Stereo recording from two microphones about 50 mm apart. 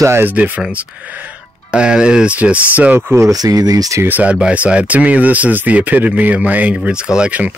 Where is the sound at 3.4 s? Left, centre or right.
Right.